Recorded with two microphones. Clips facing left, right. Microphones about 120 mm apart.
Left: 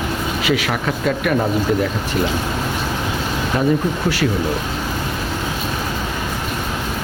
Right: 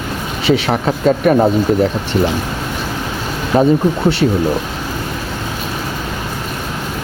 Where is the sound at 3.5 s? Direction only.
35° right (ahead or behind).